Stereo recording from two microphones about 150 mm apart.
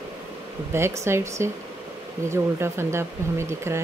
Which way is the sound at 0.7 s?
15° right (ahead or behind).